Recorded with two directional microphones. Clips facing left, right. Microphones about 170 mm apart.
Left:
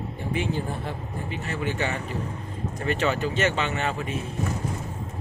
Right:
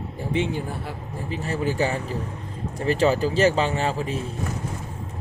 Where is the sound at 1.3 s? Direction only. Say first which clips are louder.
Right 5 dB; 35° right (ahead or behind).